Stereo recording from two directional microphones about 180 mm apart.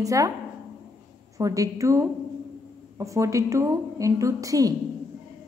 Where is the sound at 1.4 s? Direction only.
20° right (ahead or behind).